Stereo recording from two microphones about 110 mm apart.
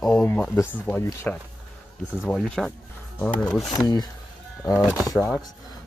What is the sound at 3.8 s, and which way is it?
Speech, 35° left (ahead or behind).